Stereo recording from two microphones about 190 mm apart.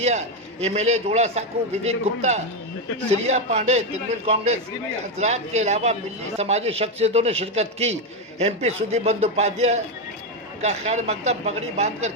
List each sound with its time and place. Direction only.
0.0 s a man's voice: 35° right (ahead or behind)